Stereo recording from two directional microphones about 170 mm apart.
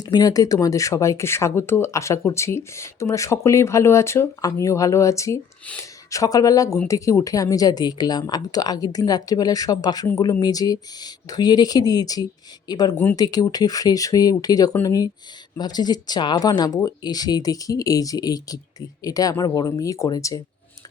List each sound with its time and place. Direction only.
0.0 s a woman's voice: 25° left (ahead or behind)